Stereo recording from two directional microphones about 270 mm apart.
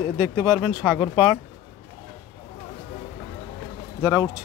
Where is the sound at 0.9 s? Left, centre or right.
Centre.